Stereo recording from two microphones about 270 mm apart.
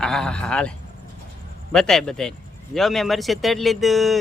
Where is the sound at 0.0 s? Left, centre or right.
Centre.